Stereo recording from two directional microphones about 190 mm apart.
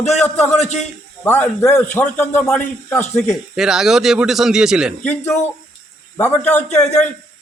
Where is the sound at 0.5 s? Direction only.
35° left (ahead or behind).